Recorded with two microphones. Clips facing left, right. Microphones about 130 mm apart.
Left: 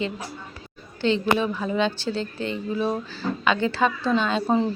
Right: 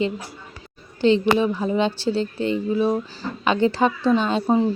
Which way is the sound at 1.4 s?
20° right (ahead or behind).